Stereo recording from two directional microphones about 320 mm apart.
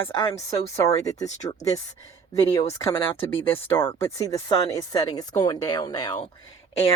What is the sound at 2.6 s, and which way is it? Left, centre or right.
Speech, centre.